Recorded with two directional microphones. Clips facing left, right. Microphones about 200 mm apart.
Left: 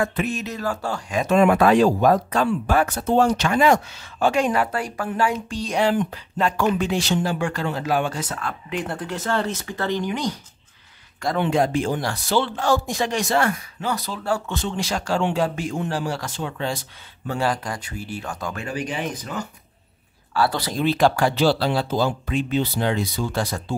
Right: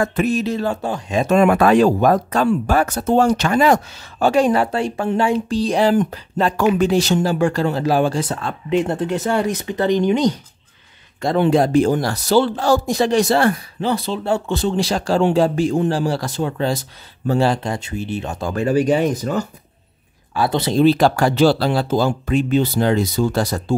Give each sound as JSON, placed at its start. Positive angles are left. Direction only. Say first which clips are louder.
{"t": 0.0, "sound": "speech", "louder": "right 6 dB", "side_deg": -40}
{"t": 1.2, "sound": "speech", "louder": "right 2 dB", "side_deg": -50}
{"t": 2.3, "sound": "speech", "louder": "right 3 dB", "side_deg": -40}
{"t": 11.3, "sound": "speech", "louder": "right 7 dB", "side_deg": -35}
{"t": 14.6, "sound": "speech", "louder": "right 7 dB", "side_deg": -35}
{"t": 17.3, "sound": "speech", "louder": "right 6 dB", "side_deg": -30}
{"t": 18.5, "sound": "speech", "louder": "right 15 dB", "side_deg": -40}
{"t": 20.3, "sound": "speech", "louder": "right 5 dB", "side_deg": -20}
{"t": 20.8, "sound": "speech", "louder": "right 4 dB", "side_deg": -35}